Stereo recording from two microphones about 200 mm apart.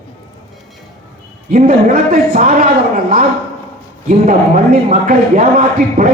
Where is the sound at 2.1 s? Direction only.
45° right (ahead or behind).